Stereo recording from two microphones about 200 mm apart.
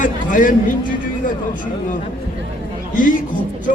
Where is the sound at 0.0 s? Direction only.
40° left (ahead or behind).